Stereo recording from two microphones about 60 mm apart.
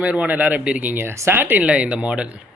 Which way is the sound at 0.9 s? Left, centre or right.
Right.